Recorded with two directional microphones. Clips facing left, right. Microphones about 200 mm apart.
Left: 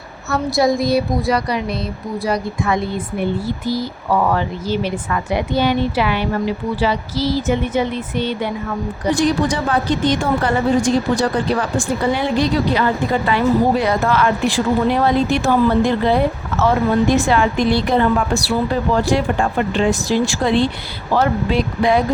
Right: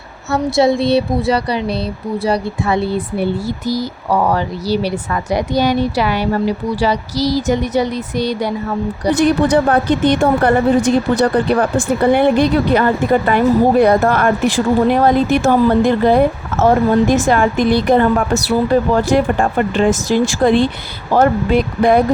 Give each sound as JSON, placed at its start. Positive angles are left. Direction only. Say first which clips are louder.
{"t": 0.3, "sound": "speech", "louder": "right 3 dB", "side_deg": -25}
{"t": 9.2, "sound": "a woman's voice", "louder": "right 7 dB", "side_deg": -60}